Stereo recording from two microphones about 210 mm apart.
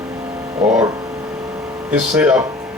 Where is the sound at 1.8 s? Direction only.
5° right (ahead or behind).